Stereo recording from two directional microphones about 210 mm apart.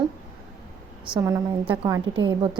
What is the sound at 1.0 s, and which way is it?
Speech, 5° right (ahead or behind).